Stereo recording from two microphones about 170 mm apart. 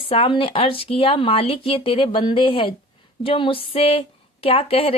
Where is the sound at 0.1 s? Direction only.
35° left (ahead or behind).